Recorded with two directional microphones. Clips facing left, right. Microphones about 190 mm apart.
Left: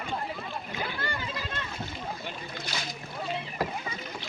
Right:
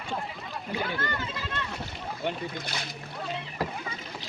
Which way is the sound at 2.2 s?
60° right (ahead or behind).